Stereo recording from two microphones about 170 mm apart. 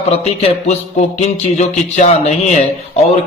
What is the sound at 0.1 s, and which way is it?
A man's voice, 40° left (ahead or behind).